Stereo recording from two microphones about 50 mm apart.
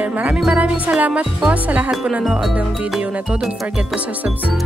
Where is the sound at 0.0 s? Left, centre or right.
Right.